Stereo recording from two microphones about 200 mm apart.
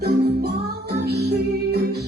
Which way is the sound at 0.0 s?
55° right (ahead or behind).